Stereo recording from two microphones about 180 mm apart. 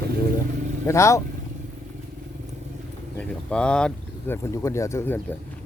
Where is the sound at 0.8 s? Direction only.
15° left (ahead or behind).